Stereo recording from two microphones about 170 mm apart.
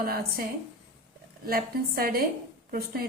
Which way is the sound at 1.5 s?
60° right (ahead or behind).